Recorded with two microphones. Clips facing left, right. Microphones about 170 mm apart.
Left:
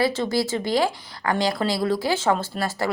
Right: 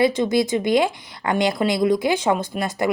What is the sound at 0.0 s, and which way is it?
A woman's voice, 20° right (ahead or behind).